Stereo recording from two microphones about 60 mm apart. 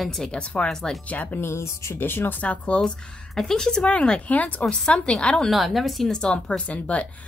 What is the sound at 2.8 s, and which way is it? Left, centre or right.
Speech, centre.